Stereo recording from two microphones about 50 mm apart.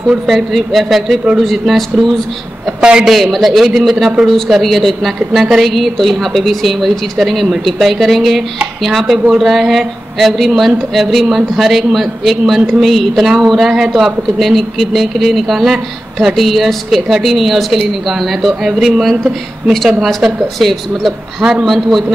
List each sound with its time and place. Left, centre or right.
0.3 s speech: centre
2.8 s a man's voice: centre
3.1 s speech: centre
20.5 s speech: centre